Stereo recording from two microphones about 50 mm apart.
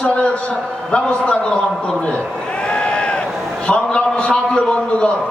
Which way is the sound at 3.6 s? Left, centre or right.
Left.